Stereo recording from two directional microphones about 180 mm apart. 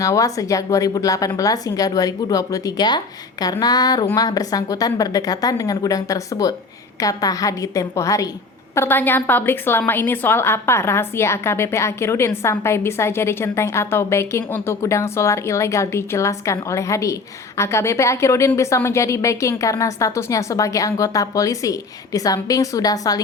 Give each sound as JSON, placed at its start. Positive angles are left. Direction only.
{"t": 0.0, "sound": "a woman's voice", "side_deg": 20}